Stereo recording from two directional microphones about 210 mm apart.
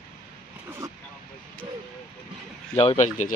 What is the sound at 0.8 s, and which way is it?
Vehicle, 15° right (ahead or behind).